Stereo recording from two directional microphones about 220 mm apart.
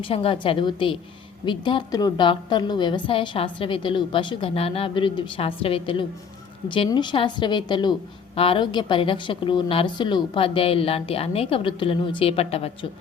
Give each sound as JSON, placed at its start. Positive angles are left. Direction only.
{"t": 0.0, "sound": "a woman's voice", "side_deg": 25}